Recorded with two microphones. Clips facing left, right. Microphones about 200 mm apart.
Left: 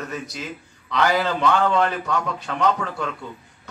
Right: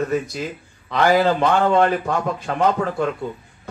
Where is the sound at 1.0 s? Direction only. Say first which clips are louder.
Right 5 dB; 40° right (ahead or behind).